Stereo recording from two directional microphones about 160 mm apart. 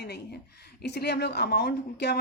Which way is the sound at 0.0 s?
90° left.